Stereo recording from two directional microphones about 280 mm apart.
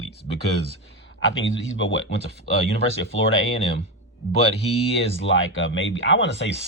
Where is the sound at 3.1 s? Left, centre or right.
Left.